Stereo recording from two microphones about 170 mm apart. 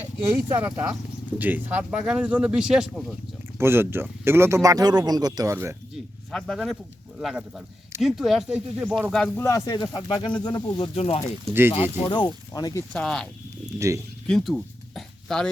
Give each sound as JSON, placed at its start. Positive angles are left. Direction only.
{"t": 0.5, "sound": "speech", "side_deg": -15}
{"t": 3.6, "sound": "speech", "side_deg": -15}
{"t": 6.3, "sound": "speech", "side_deg": 5}
{"t": 9.4, "sound": "speech", "side_deg": 20}
{"t": 12.9, "sound": "speech", "side_deg": 5}
{"t": 13.7, "sound": "speech", "side_deg": -20}
{"t": 14.3, "sound": "a sound", "side_deg": 0}